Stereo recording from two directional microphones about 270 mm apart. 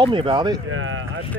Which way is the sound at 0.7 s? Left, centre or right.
Right.